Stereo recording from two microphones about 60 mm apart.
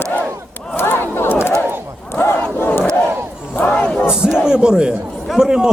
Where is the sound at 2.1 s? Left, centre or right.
Left.